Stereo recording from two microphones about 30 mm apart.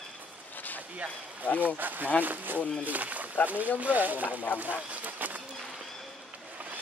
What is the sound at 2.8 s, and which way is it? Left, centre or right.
Speech, right.